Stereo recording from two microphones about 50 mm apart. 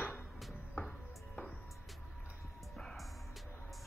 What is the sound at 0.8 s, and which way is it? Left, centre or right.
Music, left.